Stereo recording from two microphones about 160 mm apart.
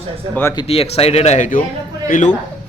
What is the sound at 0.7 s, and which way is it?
Speech, 40° left (ahead or behind).